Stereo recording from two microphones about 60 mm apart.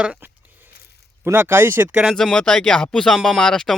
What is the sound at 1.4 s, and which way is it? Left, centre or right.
Speech, right.